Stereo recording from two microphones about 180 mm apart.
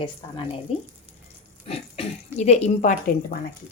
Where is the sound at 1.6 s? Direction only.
35° left (ahead or behind).